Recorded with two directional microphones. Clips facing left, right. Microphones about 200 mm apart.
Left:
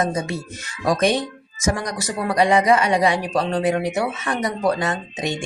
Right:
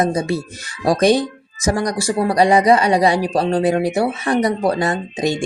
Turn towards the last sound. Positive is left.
turn(degrees=-35)  # may be behind; listen again after turning